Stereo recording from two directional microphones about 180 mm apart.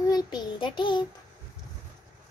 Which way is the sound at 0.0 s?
20° left (ahead or behind).